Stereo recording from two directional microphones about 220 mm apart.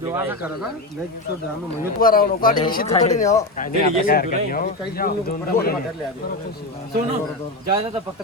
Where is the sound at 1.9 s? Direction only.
40° left (ahead or behind).